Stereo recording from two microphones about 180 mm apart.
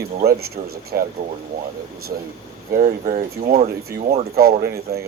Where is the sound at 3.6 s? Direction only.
35° right (ahead or behind).